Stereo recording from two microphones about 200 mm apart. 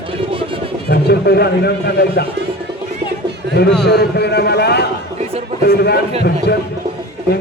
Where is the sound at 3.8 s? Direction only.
55° left (ahead or behind).